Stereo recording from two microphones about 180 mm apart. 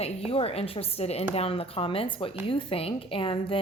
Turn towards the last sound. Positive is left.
turn(degrees=30)  # may be behind; listen again after turning